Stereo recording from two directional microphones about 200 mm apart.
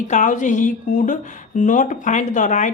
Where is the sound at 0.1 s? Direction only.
40° left (ahead or behind).